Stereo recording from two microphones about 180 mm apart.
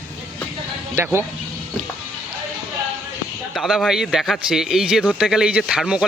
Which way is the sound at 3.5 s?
Centre (ahead or behind).